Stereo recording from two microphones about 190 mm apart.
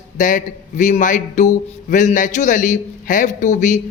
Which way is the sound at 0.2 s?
45° left (ahead or behind).